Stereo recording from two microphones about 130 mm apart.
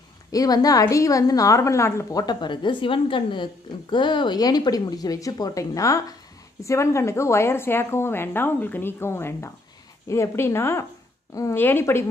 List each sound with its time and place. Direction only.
0.3 s a woman's voice: 30° left (ahead or behind)